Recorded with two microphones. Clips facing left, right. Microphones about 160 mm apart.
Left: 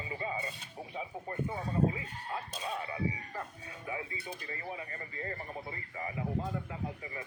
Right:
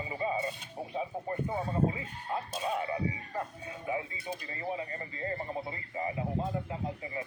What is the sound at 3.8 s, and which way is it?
Speech, 25° right (ahead or behind).